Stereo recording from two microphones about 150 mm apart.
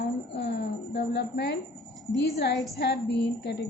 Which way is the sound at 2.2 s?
90° left.